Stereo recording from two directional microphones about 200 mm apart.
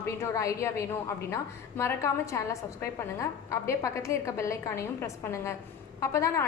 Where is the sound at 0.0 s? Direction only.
15° left (ahead or behind).